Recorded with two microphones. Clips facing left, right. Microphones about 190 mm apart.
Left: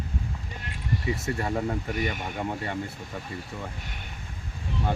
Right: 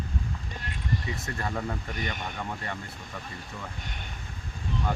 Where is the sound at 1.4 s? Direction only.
25° left (ahead or behind).